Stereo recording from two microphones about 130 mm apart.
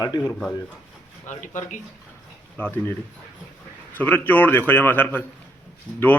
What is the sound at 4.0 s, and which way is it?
A man's voice, 15° left (ahead or behind).